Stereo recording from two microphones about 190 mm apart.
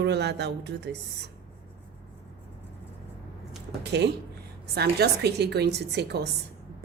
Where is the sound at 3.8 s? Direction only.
65° right (ahead or behind).